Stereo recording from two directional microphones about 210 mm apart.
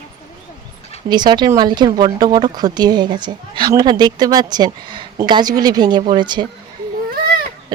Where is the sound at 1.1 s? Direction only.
20° right (ahead or behind).